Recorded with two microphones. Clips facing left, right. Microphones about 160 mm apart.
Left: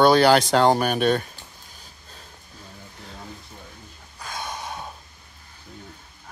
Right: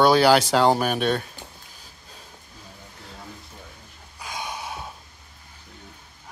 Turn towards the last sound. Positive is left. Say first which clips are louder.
# even
turn(degrees=-10)  # may be behind; listen again after turning